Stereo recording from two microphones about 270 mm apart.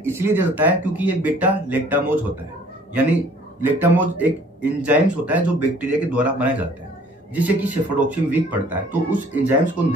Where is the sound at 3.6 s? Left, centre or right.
Centre.